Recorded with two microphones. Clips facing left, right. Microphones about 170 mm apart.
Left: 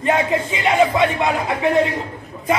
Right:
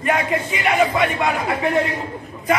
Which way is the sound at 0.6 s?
25° left (ahead or behind).